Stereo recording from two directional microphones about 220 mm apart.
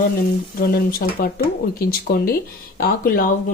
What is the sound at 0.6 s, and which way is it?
Speech, 45° left (ahead or behind).